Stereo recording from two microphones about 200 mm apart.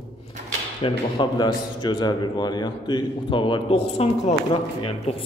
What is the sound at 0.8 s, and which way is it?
A man's voice, 25° left (ahead or behind).